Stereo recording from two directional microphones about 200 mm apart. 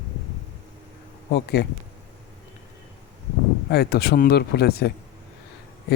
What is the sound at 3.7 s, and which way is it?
Speech, 50° left (ahead or behind).